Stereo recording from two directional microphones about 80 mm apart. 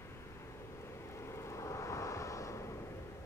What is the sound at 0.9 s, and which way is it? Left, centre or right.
Vehicle, left.